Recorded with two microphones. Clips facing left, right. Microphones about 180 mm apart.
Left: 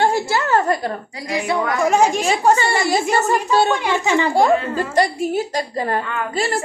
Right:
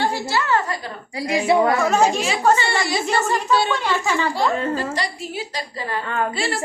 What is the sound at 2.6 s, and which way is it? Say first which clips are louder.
A woman's voice: left 4 dB; 45° left (ahead or behind).